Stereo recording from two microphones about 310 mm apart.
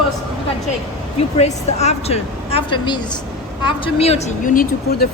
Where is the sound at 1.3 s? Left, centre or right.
Left.